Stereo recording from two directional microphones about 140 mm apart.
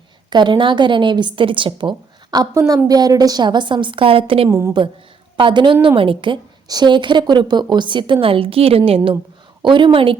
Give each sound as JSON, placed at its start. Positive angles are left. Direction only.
{"t": 0.3, "sound": "a woman's voice", "side_deg": -35}
{"t": 4.4, "sound": "a woman's voice", "side_deg": -20}
{"t": 5.4, "sound": "a woman's voice", "side_deg": -35}